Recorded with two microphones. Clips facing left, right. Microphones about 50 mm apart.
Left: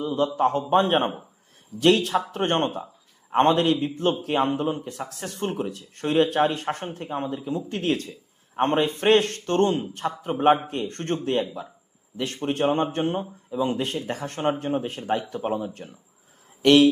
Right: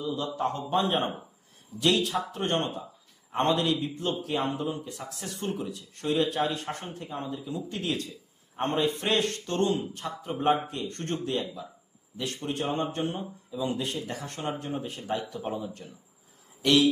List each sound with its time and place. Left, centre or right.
0.0 s speech: left